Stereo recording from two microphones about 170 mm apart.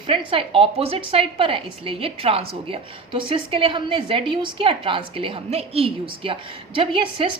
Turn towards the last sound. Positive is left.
turn(degrees=-30)  # may be behind; listen again after turning